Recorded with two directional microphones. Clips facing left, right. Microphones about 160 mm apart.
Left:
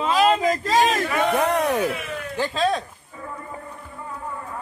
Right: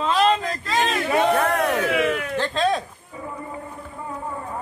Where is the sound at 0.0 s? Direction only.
5° left (ahead or behind).